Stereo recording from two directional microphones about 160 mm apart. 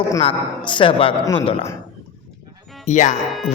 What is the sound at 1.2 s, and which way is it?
Speech, 20° left (ahead or behind).